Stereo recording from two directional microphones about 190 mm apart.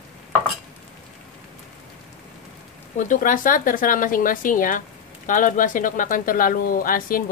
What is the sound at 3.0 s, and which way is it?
Speech, 45° left (ahead or behind).